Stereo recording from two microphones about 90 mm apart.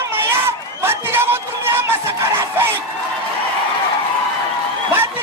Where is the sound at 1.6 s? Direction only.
25° right (ahead or behind).